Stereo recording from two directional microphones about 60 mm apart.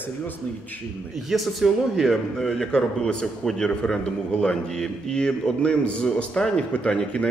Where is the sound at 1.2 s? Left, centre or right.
Centre.